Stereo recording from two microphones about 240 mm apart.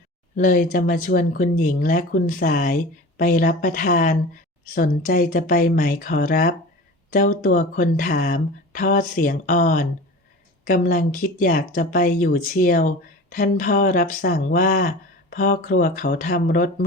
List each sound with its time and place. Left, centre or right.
0.3 s speech: left